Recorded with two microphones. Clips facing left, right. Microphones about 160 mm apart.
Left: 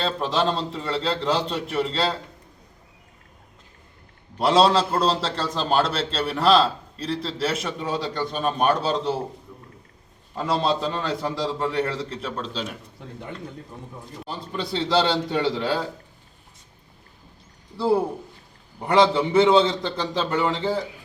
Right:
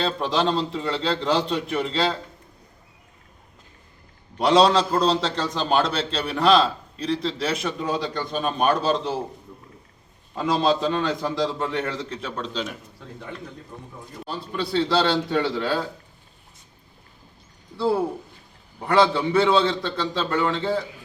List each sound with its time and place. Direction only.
0.0 s a man's voice: centre (ahead or behind)
4.4 s a man's voice: 5° left (ahead or behind)
10.3 s a man's voice: centre (ahead or behind)
14.3 s a man's voice: 20° left (ahead or behind)
17.7 s a man's voice: 15° left (ahead or behind)